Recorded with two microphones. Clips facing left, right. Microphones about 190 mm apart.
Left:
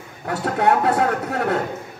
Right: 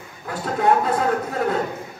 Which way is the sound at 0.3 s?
70° left (ahead or behind).